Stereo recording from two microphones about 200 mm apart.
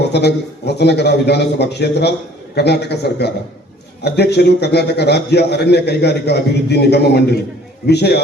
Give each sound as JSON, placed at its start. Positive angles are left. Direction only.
{"t": 0.1, "sound": "a man's voice", "side_deg": 55}